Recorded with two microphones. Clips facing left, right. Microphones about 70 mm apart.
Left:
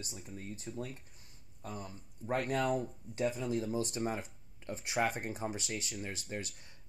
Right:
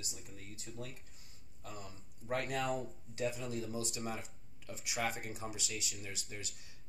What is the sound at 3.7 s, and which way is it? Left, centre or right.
Speech, left.